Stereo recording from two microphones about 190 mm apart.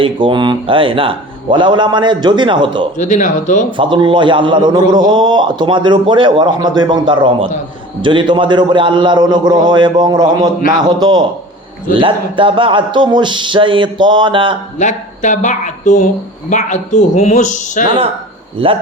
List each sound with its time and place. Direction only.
0.0 s a man's voice: 25° right (ahead or behind)
3.0 s a man's voice: 40° left (ahead or behind)
3.7 s a man's voice: 25° right (ahead or behind)
14.8 s a man's voice: 40° left (ahead or behind)
17.8 s a man's voice: 30° right (ahead or behind)